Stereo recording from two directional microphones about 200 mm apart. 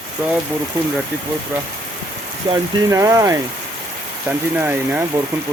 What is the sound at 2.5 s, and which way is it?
Speech, 15° right (ahead or behind).